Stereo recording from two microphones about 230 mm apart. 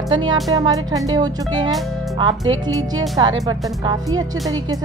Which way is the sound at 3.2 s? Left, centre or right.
Centre.